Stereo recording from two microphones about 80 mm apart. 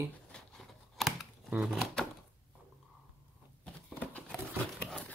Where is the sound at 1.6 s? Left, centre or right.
Centre.